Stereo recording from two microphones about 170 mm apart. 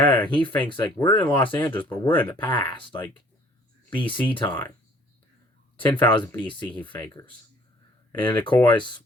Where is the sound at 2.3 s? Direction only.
30° left (ahead or behind).